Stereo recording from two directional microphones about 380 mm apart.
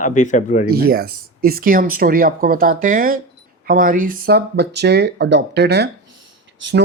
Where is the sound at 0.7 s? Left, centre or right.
Right.